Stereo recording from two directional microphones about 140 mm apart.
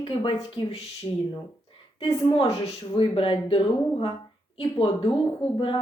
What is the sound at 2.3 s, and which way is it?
Speech, 40° left (ahead or behind).